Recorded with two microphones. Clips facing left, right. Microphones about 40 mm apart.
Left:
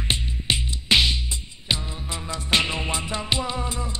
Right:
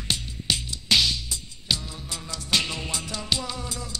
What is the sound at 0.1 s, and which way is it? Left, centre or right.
Music, left.